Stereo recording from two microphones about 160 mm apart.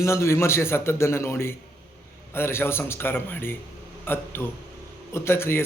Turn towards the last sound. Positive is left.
turn(degrees=15)  # may be behind; listen again after turning